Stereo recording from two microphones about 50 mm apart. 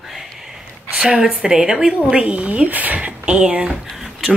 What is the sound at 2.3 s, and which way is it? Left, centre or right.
Speech, right.